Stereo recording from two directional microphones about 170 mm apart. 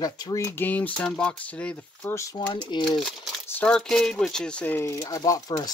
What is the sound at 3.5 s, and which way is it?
Speech, 5° left (ahead or behind).